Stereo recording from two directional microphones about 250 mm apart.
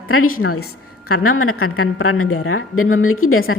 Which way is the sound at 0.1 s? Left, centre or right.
Left.